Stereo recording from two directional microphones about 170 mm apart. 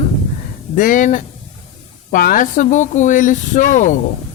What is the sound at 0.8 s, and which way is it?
Speech, 50° left (ahead or behind).